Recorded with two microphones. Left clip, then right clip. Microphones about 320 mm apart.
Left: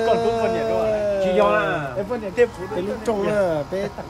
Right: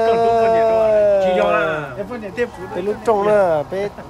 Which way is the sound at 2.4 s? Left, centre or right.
Centre.